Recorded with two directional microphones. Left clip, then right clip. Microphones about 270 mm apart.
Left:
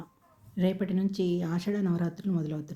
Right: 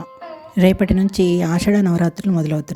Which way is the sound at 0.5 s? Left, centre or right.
Right.